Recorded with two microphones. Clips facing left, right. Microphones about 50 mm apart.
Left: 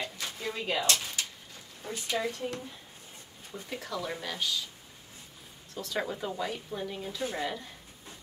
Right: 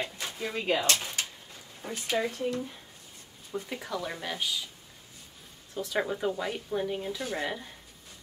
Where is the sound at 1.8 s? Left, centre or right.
Right.